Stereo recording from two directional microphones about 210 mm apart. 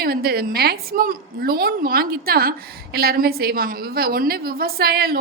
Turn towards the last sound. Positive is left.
turn(degrees=-45)  # may be behind; listen again after turning